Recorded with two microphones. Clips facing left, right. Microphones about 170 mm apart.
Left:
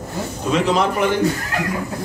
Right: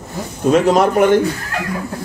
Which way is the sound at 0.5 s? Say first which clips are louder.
Right 6 dB; 50° right (ahead or behind).